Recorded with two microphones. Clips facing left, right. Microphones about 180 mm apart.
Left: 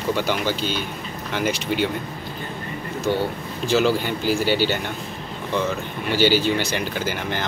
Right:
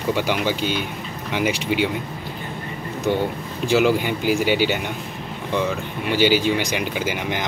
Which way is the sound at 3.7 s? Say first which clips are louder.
Right 2 dB; 10° right (ahead or behind).